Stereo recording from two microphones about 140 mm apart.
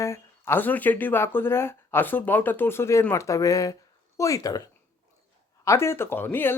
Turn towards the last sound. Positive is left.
turn(degrees=15)  # may be behind; listen again after turning